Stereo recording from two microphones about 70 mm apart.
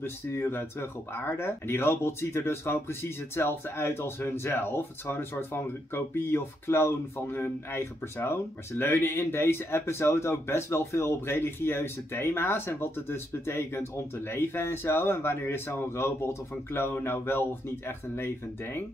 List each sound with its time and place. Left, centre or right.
0.0 s speech: left